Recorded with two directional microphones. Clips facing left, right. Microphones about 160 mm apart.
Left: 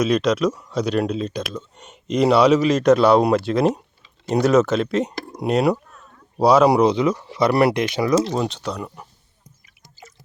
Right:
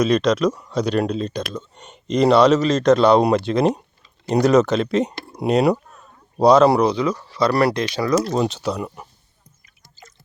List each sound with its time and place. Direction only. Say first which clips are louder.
0.0 s speech: right 1 dB; 5° left (ahead or behind)
6.7 s speech: left 2 dB; 20° left (ahead or behind)
8.4 s speech: right 3 dB; 5° right (ahead or behind)
10.0 s drip: left 3 dB; 5° left (ahead or behind)